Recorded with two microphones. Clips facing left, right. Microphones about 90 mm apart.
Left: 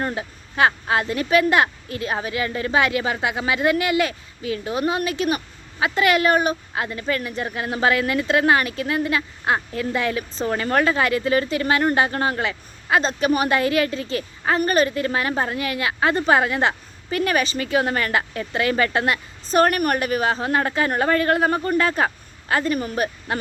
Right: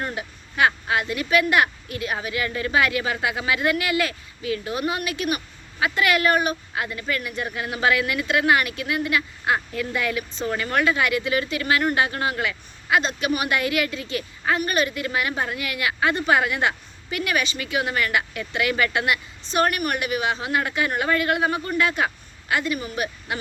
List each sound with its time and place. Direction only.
0.0 s speech: 30° left (ahead or behind)